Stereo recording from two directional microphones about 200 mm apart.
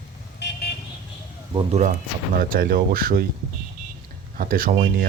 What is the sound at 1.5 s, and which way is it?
Speech, 35° right (ahead or behind).